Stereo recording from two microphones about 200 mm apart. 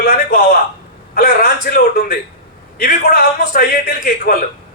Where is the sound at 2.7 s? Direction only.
45° left (ahead or behind).